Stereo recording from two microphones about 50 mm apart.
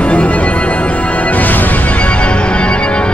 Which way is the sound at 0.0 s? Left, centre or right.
Left.